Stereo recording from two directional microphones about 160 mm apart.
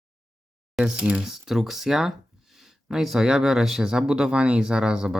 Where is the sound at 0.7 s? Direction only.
5° right (ahead or behind).